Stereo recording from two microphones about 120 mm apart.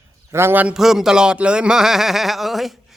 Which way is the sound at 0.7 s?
5° right (ahead or behind).